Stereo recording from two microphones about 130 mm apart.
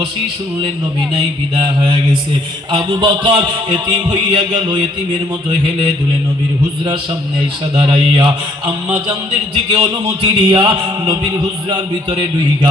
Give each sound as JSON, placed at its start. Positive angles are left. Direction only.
{"t": 1.6, "sound": "a man's voice", "side_deg": -40}
{"t": 7.8, "sound": "a man's voice", "side_deg": -40}